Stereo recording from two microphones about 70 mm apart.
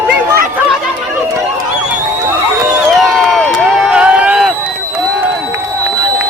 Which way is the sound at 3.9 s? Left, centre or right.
Centre.